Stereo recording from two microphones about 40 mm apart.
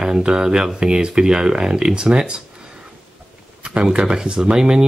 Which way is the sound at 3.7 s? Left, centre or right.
Right.